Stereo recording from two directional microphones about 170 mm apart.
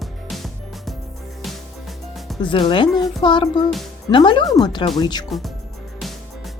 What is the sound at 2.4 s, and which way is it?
Speech, 30° left (ahead or behind).